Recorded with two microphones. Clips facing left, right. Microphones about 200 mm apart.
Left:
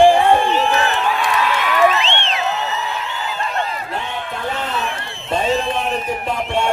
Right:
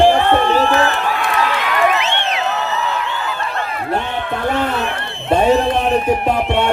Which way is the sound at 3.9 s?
60° right (ahead or behind).